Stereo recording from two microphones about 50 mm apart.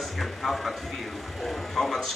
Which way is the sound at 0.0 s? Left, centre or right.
Centre.